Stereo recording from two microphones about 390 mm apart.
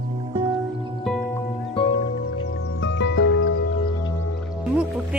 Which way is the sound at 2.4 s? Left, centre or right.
Left.